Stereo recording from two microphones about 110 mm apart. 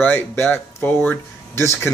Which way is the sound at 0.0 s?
15° left (ahead or behind).